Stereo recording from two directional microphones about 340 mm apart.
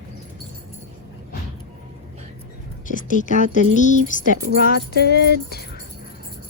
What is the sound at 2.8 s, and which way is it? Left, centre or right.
Speech, left.